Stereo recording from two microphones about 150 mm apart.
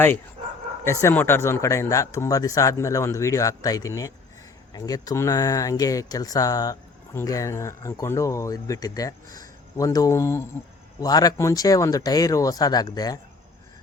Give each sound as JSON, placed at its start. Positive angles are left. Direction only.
{"t": 1.0, "sound": "speech", "side_deg": 15}